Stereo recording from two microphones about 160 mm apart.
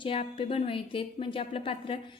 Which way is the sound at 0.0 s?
35° left (ahead or behind).